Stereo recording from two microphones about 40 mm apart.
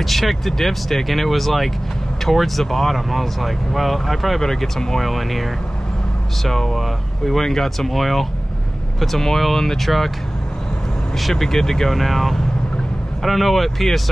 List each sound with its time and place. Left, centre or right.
0.0 s speech: centre
4.4 s speech: centre
11.1 s speech: centre